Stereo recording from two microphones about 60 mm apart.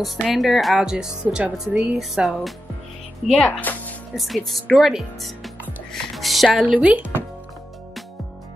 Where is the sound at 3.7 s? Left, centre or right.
Left.